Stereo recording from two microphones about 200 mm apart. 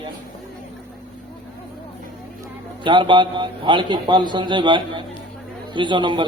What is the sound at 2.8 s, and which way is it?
A man's voice, 25° right (ahead or behind).